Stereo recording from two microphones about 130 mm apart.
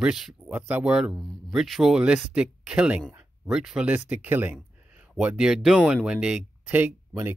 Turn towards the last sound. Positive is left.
turn(degrees=-15)  # may be behind; listen again after turning